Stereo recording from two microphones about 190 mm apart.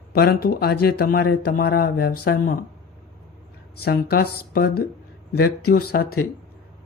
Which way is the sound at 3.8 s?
55° left (ahead or behind).